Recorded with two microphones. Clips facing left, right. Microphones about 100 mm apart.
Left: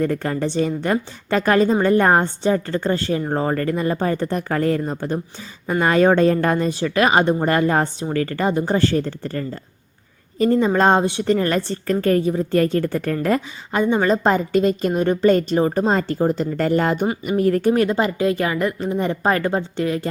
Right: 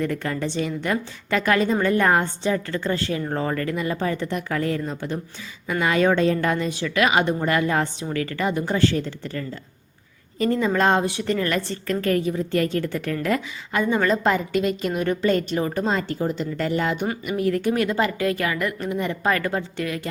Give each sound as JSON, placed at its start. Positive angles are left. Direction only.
{"t": 0.0, "sound": "a woman's voice", "side_deg": 35}
{"t": 10.3, "sound": "a woman's voice", "side_deg": 30}